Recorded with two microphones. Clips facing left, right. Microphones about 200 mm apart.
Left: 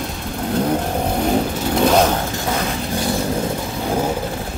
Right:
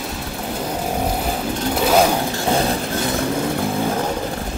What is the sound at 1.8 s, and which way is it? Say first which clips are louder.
Vehicle: even; 5° right (ahead or behind).